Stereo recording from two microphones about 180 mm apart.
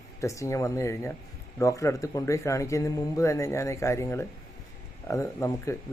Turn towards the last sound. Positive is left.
turn(degrees=15)  # may be behind; listen again after turning